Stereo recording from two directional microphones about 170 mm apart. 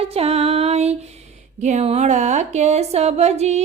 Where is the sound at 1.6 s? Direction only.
40° right (ahead or behind).